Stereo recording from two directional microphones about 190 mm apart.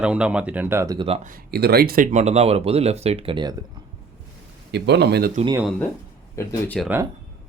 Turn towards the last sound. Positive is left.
turn(degrees=10)  # may be behind; listen again after turning